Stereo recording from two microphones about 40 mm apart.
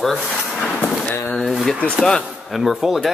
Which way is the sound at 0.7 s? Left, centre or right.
Left.